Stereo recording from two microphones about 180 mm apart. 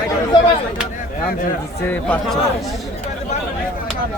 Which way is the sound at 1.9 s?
10° left (ahead or behind).